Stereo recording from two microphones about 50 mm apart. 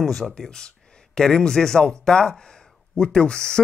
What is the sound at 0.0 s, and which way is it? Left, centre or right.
Speech, centre.